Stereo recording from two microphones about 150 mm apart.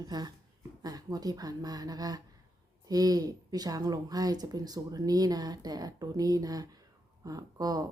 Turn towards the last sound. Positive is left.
turn(degrees=-25)  # may be behind; listen again after turning